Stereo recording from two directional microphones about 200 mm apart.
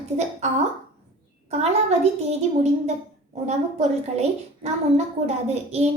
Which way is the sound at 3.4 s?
35° right (ahead or behind).